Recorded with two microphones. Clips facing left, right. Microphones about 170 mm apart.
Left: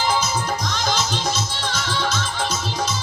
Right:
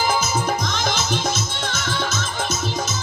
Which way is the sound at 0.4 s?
55° right (ahead or behind).